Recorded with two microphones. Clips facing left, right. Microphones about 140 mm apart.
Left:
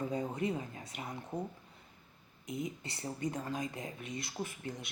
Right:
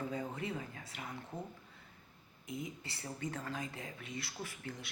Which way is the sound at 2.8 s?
20° left (ahead or behind).